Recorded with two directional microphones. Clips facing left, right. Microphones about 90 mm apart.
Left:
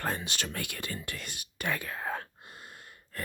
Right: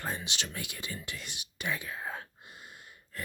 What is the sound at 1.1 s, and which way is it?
Whispering, 50° left (ahead or behind).